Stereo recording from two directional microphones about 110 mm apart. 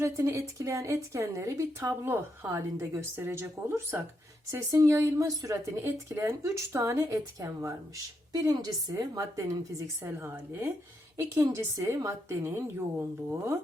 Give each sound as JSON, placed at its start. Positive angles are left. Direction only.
{"t": 0.0, "sound": "a woman's voice", "side_deg": -25}